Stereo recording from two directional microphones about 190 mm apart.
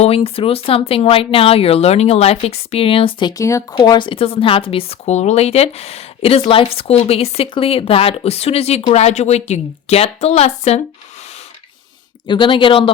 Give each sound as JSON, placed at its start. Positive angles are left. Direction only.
{"t": 0.0, "sound": "a woman's voice", "side_deg": 30}
{"t": 12.3, "sound": "a woman's voice", "side_deg": 25}